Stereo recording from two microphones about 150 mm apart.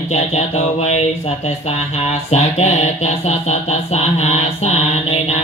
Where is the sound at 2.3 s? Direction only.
45° left (ahead or behind).